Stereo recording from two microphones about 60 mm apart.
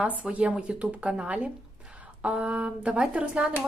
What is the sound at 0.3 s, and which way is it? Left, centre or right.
Speech, centre.